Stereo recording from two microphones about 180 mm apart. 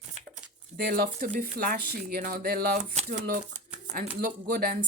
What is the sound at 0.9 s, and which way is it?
Speech, 50° right (ahead or behind).